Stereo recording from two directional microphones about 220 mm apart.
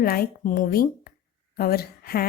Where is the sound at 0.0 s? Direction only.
40° left (ahead or behind).